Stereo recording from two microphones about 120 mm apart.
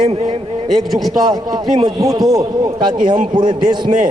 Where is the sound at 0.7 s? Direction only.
Centre (ahead or behind).